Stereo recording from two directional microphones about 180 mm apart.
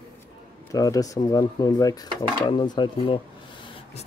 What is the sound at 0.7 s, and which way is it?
Speech, 20° left (ahead or behind).